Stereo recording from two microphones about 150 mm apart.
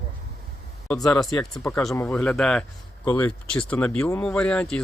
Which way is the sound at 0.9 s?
25° left (ahead or behind).